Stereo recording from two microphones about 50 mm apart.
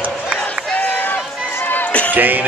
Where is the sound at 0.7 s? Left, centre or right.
Left.